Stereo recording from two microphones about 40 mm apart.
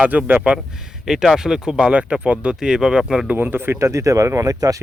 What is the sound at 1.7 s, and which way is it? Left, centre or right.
Speech, right.